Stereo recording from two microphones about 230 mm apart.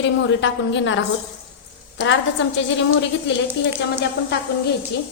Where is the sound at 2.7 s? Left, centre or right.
Left.